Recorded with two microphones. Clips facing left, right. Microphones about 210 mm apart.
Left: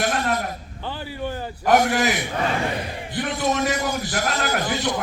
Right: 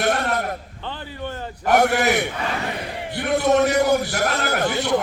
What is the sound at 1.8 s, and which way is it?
A man's voice, 60° right (ahead or behind).